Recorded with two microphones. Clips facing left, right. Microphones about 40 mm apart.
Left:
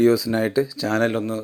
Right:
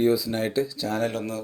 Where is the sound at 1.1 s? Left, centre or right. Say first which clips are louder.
Left 5 dB; left.